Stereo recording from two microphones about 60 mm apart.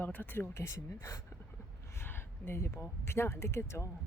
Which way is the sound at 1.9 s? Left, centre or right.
Left.